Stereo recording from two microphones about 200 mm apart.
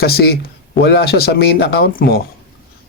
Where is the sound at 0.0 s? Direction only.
50° left (ahead or behind).